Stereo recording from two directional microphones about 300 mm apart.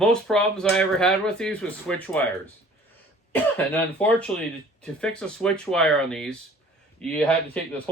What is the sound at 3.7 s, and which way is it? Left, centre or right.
Speech, centre.